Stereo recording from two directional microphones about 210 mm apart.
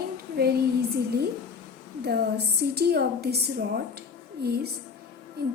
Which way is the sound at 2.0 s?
50° right (ahead or behind).